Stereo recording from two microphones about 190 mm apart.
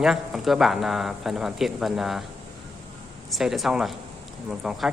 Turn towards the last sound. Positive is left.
turn(degrees=0)  # may be behind; listen again after turning